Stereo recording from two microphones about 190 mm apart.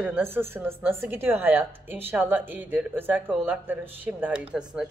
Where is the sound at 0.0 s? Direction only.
10° right (ahead or behind).